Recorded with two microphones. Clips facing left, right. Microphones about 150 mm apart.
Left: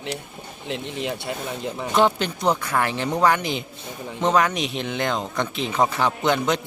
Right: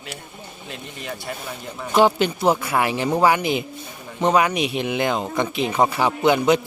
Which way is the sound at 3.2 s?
5° right (ahead or behind).